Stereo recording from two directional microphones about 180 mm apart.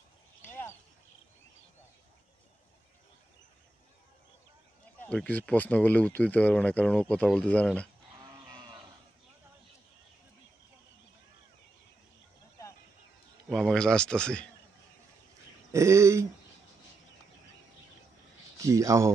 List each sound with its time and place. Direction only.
0.4 s a sound: 15° left (ahead or behind)
5.0 s speech: 10° left (ahead or behind)
8.5 s cattle: 25° right (ahead or behind)
13.5 s speech: centre (ahead or behind)
15.7 s speech: 15° right (ahead or behind)
18.6 s speech: 15° right (ahead or behind)